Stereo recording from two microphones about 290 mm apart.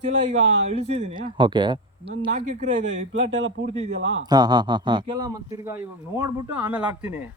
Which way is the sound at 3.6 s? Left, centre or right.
Centre.